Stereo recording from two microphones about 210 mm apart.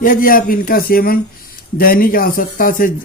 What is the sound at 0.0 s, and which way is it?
Speech, 40° left (ahead or behind).